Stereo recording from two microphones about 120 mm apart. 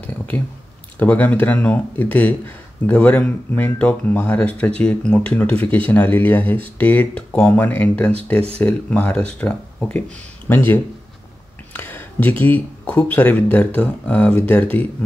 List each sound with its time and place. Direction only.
0.3 s speech: 15° left (ahead or behind)
11.7 s speech: 15° left (ahead or behind)